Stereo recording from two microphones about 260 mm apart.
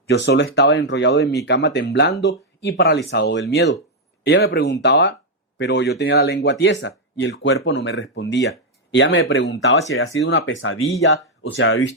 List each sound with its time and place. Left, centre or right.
0.1 s speech: left